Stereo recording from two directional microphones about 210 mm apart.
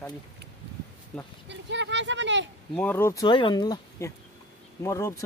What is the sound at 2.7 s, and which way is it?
Speech, 10° left (ahead or behind).